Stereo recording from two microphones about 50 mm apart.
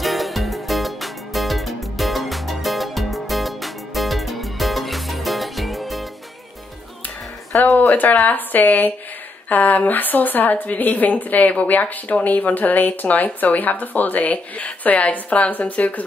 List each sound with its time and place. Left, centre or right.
0.0 s music: centre
7.5 s a sound: left
7.9 s a woman's voice: left